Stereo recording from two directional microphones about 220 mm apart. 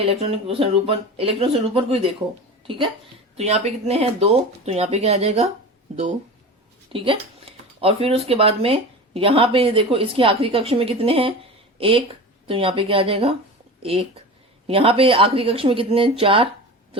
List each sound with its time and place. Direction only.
0.0 s speech: 25° right (ahead or behind)
6.9 s speech: 25° right (ahead or behind)
14.7 s speech: 25° right (ahead or behind)